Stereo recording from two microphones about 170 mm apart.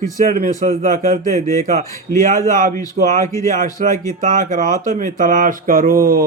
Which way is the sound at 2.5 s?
50° right (ahead or behind).